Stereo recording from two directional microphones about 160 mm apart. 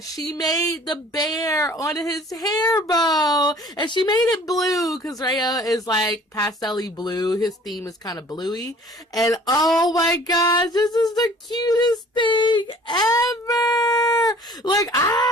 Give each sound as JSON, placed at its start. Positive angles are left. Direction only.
{"t": 0.3, "sound": "female singing", "side_deg": 25}